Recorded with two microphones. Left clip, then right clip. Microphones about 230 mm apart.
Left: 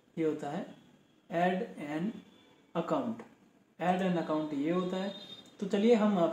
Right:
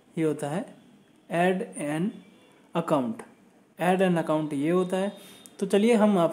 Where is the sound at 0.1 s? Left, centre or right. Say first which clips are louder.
Right 6 dB; right.